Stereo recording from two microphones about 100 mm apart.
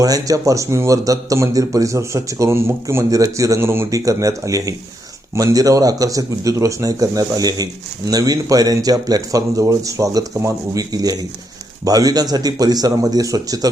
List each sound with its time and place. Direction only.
0.0 s speech: 35° right (ahead or behind)